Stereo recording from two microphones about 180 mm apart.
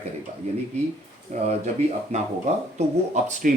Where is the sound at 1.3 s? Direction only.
40° right (ahead or behind).